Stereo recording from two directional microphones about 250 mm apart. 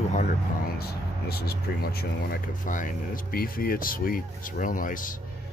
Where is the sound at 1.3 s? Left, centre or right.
Left.